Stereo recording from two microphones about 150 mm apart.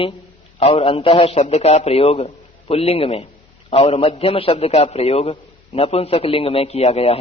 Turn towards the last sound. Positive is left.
turn(degrees=40)  # may be behind; listen again after turning